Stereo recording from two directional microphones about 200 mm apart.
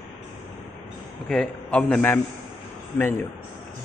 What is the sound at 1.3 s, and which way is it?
Speech, 5° left (ahead or behind).